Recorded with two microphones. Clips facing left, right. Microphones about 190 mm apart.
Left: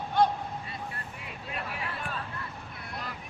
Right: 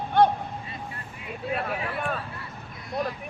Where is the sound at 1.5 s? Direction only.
60° right (ahead or behind).